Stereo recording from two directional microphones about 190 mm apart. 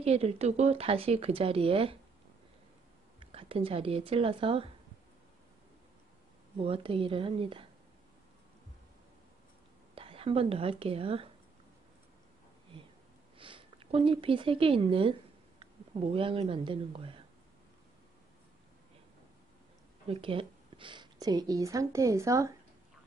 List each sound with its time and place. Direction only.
0.0 s speech: 35° right (ahead or behind)
3.2 s speech: 30° right (ahead or behind)
6.6 s a woman's voice: 30° right (ahead or behind)
9.9 s speech: 30° right (ahead or behind)
13.4 s speech: 25° right (ahead or behind)
20.1 s a woman's voice: 30° right (ahead or behind)